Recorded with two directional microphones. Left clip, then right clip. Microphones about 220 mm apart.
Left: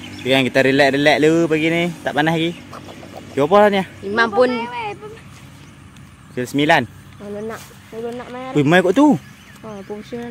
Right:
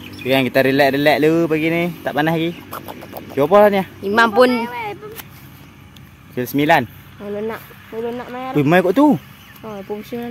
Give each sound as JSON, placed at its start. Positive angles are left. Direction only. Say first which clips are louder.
{"t": 0.3, "sound": "speech", "louder": "even", "side_deg": -5}
{"t": 4.0, "sound": "speech", "louder": "right 3 dB", "side_deg": -50}
{"t": 4.6, "sound": "speech", "louder": "right 1 dB", "side_deg": -15}
{"t": 6.3, "sound": "speech", "louder": "even", "side_deg": -10}
{"t": 7.3, "sound": "speech", "louder": "right 3 dB", "side_deg": -50}
{"t": 8.5, "sound": "speech", "louder": "even", "side_deg": 0}
{"t": 9.6, "sound": "speech", "louder": "right 3 dB", "side_deg": -45}